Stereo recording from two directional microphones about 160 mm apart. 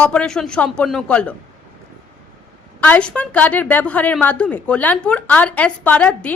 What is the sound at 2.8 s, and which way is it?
A woman's voice, 10° left (ahead or behind).